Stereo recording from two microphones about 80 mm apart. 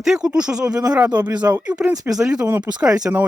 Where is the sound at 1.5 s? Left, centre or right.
Centre.